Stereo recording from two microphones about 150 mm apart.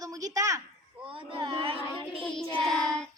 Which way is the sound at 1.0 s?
35° right (ahead or behind).